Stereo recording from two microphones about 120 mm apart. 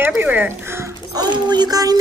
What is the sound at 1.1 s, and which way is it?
Speech, 35° right (ahead or behind).